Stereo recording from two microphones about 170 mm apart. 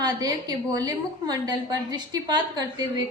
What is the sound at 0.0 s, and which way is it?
A woman's voice, 20° right (ahead or behind).